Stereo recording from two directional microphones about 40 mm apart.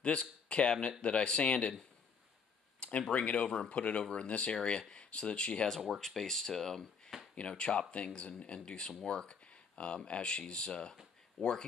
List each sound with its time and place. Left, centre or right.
0.0 s speech: left
2.8 s speech: left
5.9 s speech: centre
7.3 s speech: left
11.4 s speech: centre